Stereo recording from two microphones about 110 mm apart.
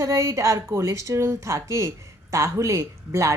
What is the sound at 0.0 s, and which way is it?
A woman's voice, 30° right (ahead or behind).